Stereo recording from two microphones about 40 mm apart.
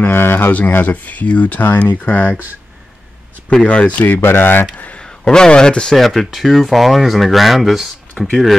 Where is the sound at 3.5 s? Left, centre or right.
Left.